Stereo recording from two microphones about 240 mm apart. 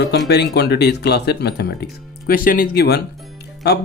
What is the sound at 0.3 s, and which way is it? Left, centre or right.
Speech, left.